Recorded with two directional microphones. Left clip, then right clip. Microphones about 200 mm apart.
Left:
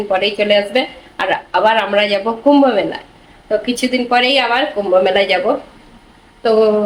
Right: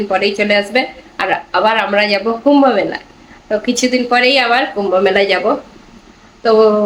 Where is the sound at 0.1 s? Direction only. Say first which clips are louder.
Even; centre (ahead or behind).